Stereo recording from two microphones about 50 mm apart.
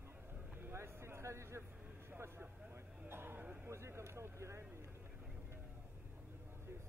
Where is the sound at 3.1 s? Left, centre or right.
Right.